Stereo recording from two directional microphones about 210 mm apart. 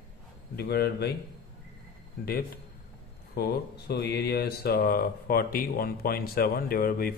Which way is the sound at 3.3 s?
50° left (ahead or behind).